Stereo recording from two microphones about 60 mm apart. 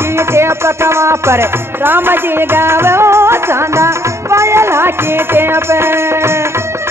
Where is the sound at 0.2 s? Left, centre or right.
Right.